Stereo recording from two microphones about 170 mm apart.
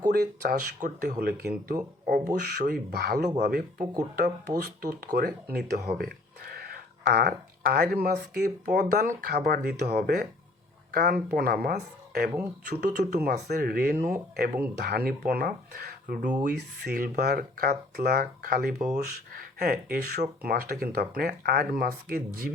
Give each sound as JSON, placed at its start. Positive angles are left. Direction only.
{"t": 0.1, "sound": "speech", "side_deg": -65}
{"t": 0.8, "sound": "speech", "side_deg": -50}
{"t": 2.4, "sound": "speech", "side_deg": -75}
{"t": 12.6, "sound": "speech", "side_deg": -75}
{"t": 16.5, "sound": "speech", "side_deg": -70}